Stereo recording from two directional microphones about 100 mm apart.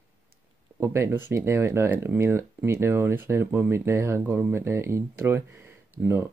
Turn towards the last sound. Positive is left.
turn(degrees=-25)  # may be behind; listen again after turning